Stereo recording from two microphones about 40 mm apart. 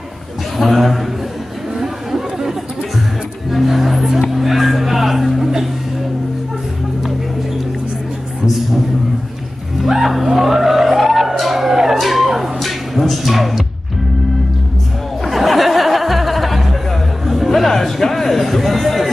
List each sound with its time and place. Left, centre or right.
0.6 s a man's voice: centre
1.8 s chatter: centre
3.4 s music: centre
4.3 s a sound: centre
9.8 s music: centre
15.2 s a sound: centre
17.3 s music: centre